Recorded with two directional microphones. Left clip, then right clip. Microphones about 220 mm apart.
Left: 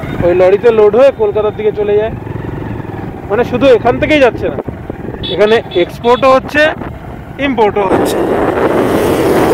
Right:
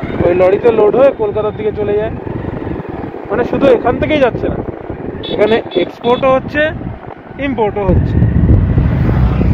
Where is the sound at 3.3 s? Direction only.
50° left (ahead or behind).